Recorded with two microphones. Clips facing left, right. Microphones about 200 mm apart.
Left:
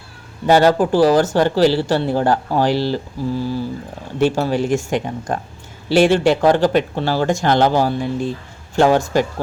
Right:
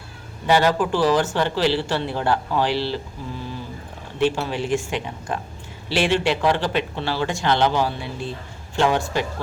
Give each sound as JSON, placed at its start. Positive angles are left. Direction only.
{"t": 0.4, "sound": "speech", "side_deg": 40}
{"t": 4.2, "sound": "speech", "side_deg": 40}